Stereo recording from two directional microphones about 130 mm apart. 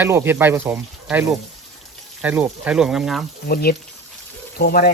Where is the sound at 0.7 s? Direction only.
5° right (ahead or behind).